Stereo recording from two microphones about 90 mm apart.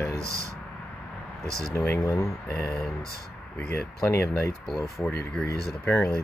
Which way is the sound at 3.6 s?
20° left (ahead or behind).